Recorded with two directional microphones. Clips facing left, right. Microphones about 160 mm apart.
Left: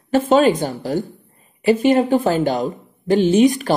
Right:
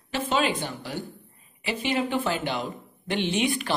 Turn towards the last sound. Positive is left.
turn(degrees=40)  # may be behind; listen again after turning